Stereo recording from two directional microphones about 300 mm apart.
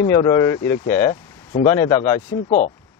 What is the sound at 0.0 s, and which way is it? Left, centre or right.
Speech, centre.